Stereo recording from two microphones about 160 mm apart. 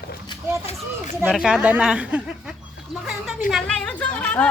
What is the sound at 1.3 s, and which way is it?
Speech, 5° right (ahead or behind).